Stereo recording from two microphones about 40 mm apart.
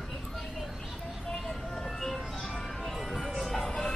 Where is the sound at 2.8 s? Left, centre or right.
Centre.